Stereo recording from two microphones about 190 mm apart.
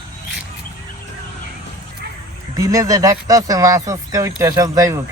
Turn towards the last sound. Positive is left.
turn(degrees=-15)  # may be behind; listen again after turning